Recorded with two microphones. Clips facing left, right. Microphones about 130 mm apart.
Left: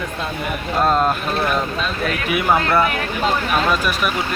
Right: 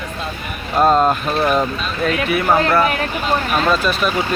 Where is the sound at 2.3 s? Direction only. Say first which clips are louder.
Even; 15° left (ahead or behind).